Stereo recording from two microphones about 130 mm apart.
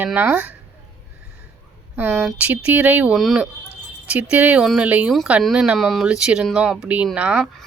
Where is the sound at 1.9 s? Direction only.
15° right (ahead or behind).